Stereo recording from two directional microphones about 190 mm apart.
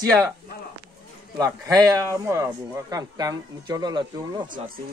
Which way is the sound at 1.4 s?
20° right (ahead or behind).